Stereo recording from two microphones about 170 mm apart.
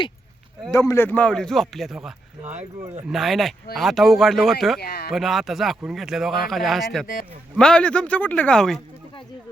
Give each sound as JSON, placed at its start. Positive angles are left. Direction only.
{"t": 0.7, "sound": "speech", "side_deg": 20}
{"t": 4.8, "sound": "speech", "side_deg": 65}
{"t": 5.1, "sound": "speech", "side_deg": 0}